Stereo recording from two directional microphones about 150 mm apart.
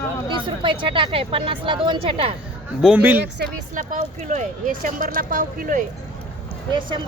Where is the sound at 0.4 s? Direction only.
35° right (ahead or behind).